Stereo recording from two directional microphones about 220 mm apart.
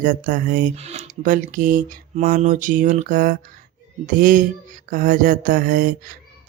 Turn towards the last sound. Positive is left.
turn(degrees=-40)  # may be behind; listen again after turning